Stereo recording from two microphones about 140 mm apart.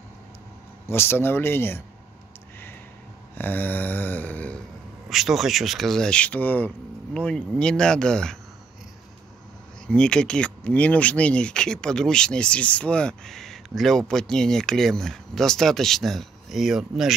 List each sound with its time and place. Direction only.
0.8 s speech: 15° left (ahead or behind)
3.3 s a sound: 15° left (ahead or behind)
5.1 s speech: centre (ahead or behind)
9.8 s speech: 5° left (ahead or behind)